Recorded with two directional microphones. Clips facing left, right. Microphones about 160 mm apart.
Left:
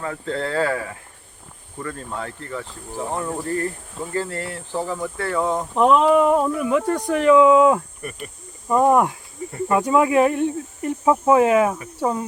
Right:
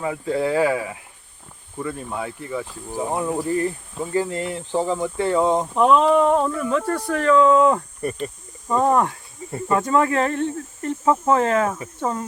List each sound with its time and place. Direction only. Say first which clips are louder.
0.0 s speech: right 4 dB; 10° right (ahead or behind)
5.7 s speech: left 2 dB; centre (ahead or behind)
8.0 s speech: right 7 dB; 30° right (ahead or behind)
8.7 s speech: left 2 dB; 15° left (ahead or behind)